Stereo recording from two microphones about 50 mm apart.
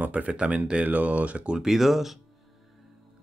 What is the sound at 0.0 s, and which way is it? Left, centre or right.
Speech, right.